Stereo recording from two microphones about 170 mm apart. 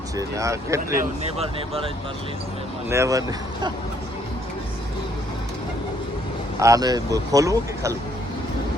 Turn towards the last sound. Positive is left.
turn(degrees=-20)  # may be behind; listen again after turning